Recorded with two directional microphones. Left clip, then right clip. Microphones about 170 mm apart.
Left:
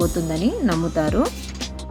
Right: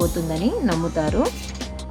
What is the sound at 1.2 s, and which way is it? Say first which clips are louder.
Music: even; centre (ahead or behind).